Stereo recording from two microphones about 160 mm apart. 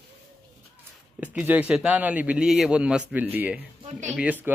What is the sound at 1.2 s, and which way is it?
A man's voice, 10° right (ahead or behind).